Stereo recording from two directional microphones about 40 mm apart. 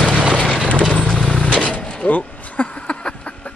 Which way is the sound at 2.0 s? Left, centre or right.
Left.